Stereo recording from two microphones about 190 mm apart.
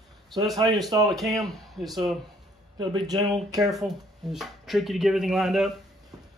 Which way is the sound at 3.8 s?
Centre (ahead or behind).